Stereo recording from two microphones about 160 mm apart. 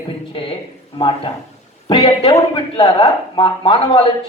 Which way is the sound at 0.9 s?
30° left (ahead or behind).